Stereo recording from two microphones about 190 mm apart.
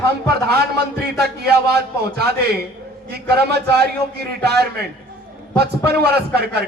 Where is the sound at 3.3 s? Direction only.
60° right (ahead or behind).